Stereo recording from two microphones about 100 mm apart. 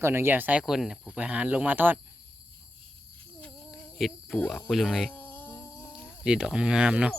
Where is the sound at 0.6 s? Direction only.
5° right (ahead or behind).